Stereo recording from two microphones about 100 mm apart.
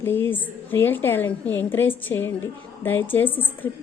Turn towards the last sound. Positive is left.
turn(degrees=20)  # may be behind; listen again after turning